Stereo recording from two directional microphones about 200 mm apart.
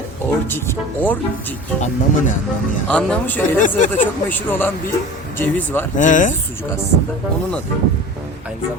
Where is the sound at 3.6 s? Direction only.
40° left (ahead or behind).